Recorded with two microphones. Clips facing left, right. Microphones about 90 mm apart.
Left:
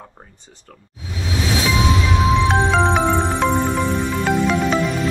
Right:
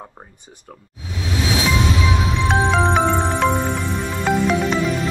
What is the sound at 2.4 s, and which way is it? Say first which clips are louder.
Music: left 1 dB; centre (ahead or behind).